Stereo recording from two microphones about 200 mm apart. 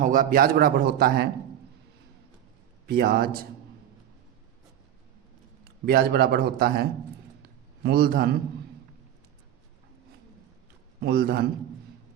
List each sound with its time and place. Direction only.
0.0 s a man's voice: 45° right (ahead or behind)
2.8 s a man's voice: 50° right (ahead or behind)
5.8 s a man's voice: 50° right (ahead or behind)
7.9 s a man's voice: 50° right (ahead or behind)
11.0 s a man's voice: 50° right (ahead or behind)